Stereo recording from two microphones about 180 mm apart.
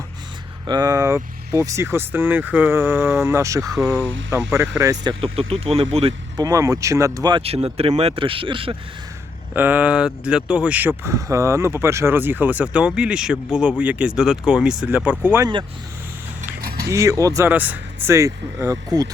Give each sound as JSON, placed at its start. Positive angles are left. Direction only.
{"t": 0.7, "sound": "speech", "side_deg": -20}
{"t": 5.5, "sound": "speech", "side_deg": -35}
{"t": 6.3, "sound": "speech", "side_deg": -20}
{"t": 9.6, "sound": "speech", "side_deg": -10}
{"t": 16.9, "sound": "speech", "side_deg": -15}